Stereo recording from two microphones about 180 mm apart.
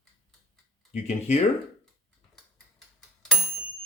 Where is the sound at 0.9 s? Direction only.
35° left (ahead or behind).